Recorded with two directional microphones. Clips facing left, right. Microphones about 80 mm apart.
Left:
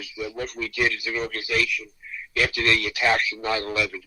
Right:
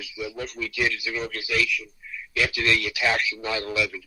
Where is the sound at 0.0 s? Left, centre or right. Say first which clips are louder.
Left 2 dB; left.